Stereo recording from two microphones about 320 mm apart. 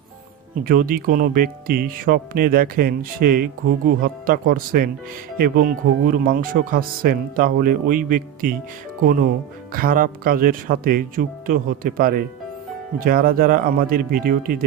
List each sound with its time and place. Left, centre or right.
0.6 s speech: right
9.7 s speech: right